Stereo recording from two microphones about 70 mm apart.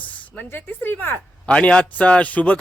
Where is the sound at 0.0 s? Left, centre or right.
Left.